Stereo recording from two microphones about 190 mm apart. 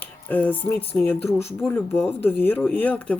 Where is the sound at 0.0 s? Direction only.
10° left (ahead or behind).